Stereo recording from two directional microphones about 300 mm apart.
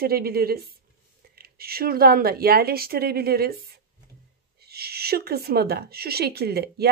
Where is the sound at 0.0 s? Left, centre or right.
Right.